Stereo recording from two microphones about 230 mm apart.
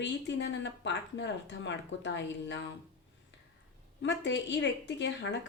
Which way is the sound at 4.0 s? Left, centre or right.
Left.